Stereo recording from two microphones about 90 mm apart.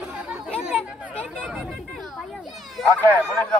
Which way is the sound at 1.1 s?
15° left (ahead or behind).